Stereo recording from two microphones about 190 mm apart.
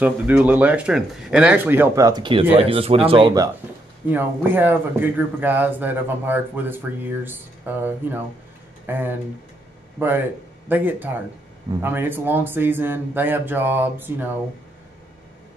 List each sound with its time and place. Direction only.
0.0 s a man's voice: 10° right (ahead or behind); by 3.4 s 25° right (ahead or behind)
4.1 s a man's voice: 10° right (ahead or behind)